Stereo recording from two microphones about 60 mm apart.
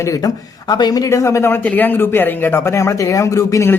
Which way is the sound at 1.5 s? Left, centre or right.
Left.